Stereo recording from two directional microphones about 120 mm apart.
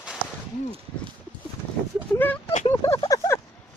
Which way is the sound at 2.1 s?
15° left (ahead or behind).